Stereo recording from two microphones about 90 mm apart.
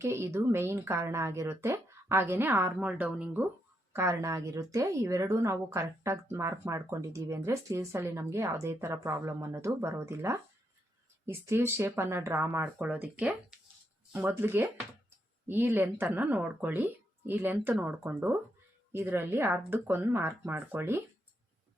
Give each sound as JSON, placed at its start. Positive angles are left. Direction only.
{"t": 0.0, "sound": "speech", "side_deg": -30}
{"t": 3.9, "sound": "a woman's voice", "side_deg": -30}
{"t": 12.6, "sound": "speech", "side_deg": -15}
{"t": 14.1, "sound": "speech", "side_deg": -25}